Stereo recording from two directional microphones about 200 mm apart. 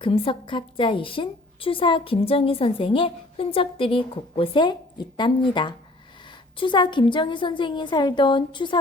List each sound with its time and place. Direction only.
0.0 s a woman's voice: 25° left (ahead or behind)